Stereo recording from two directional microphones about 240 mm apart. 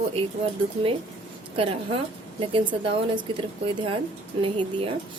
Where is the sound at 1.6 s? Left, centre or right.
Right.